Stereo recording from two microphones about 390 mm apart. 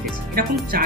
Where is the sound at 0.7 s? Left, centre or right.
Right.